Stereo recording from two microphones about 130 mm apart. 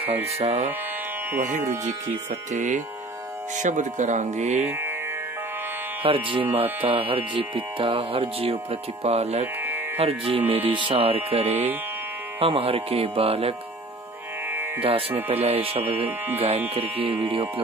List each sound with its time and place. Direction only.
0.4 s speech: 50° right (ahead or behind)
1.4 s speech: 70° right (ahead or behind)
4.6 s music: 15° right (ahead or behind)
6.0 s speech: 40° right (ahead or behind)
14.8 s speech: 45° right (ahead or behind)